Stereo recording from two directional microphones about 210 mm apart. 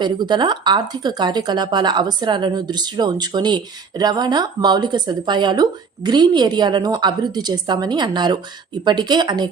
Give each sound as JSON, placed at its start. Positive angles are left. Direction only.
{"t": 0.0, "sound": "speech", "side_deg": -20}